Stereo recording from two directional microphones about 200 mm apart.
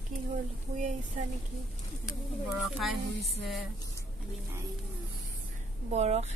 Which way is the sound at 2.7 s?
Centre (ahead or behind).